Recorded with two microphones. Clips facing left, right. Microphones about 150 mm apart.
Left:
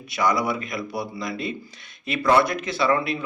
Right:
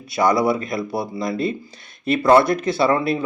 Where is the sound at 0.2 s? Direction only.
30° right (ahead or behind).